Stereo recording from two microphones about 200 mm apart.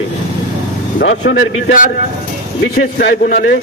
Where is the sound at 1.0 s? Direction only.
65° left (ahead or behind).